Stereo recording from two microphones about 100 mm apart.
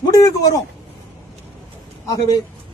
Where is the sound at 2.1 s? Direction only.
35° left (ahead or behind).